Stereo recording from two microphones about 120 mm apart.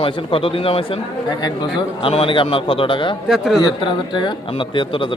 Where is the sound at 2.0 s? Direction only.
50° left (ahead or behind).